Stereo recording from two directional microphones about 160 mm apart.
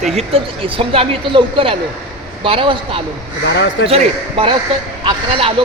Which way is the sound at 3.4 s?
90° left.